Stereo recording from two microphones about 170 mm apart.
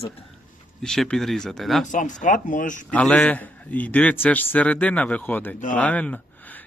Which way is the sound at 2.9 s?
5° left (ahead or behind).